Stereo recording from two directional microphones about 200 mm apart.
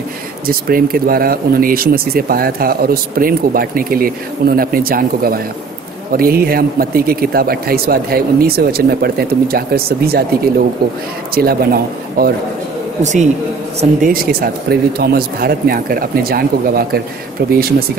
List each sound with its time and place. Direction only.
0.5 s speech: 45° right (ahead or behind)
13.0 s speech: 35° right (ahead or behind)
14.2 s speech: 50° right (ahead or behind)